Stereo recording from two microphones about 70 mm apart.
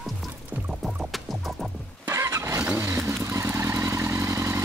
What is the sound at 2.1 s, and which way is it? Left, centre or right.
Vehicle, right.